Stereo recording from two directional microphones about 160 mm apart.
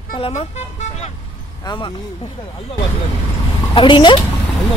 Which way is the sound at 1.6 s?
30° left (ahead or behind).